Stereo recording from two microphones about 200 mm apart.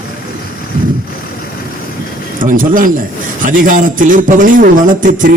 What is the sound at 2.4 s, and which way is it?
A man's voice, 45° right (ahead or behind).